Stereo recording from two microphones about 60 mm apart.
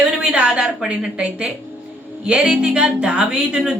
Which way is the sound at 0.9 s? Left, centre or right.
Centre.